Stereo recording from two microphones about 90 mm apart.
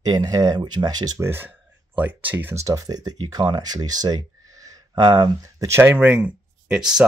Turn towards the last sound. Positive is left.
turn(degrees=-5)  # may be behind; listen again after turning